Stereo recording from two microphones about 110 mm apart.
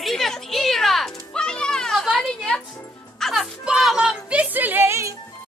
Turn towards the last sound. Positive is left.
turn(degrees=-25)  # may be behind; listen again after turning